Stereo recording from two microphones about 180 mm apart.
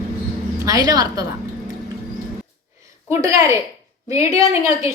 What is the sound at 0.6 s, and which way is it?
Speech, 20° right (ahead or behind).